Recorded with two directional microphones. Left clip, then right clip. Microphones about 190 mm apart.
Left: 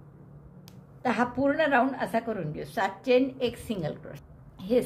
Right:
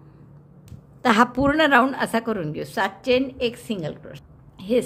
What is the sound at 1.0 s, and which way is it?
A woman's voice, 45° right (ahead or behind).